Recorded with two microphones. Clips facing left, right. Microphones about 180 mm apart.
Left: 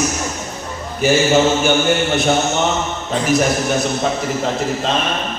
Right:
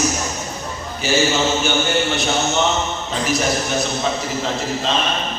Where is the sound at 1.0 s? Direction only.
55° left (ahead or behind).